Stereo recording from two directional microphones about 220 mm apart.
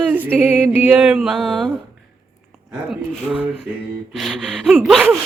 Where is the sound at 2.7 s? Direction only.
5° right (ahead or behind).